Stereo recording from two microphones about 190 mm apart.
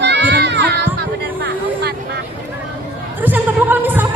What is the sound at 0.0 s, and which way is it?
Children playing, 65° right (ahead or behind).